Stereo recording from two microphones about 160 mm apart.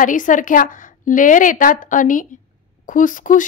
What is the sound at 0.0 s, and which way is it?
A woman's voice, 55° left (ahead or behind).